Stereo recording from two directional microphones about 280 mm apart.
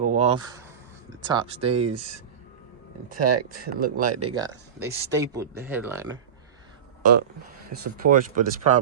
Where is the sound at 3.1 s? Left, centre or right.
Right.